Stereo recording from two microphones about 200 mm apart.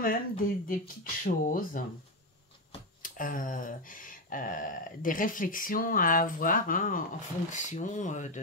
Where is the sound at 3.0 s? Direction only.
45° left (ahead or behind).